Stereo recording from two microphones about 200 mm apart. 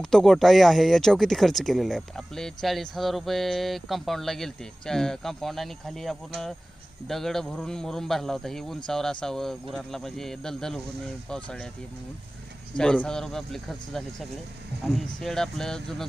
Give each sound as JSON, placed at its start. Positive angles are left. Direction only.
{"t": 0.0, "sound": "speech", "side_deg": 0}
{"t": 12.7, "sound": "speech", "side_deg": 5}